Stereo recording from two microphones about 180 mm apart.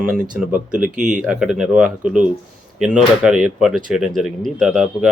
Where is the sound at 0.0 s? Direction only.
10° right (ahead or behind).